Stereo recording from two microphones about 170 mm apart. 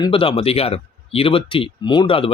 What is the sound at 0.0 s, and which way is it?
Speech, 30° left (ahead or behind).